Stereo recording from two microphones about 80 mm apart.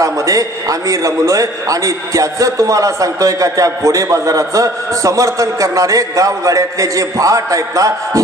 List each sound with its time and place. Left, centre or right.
0.0 s a man's voice: right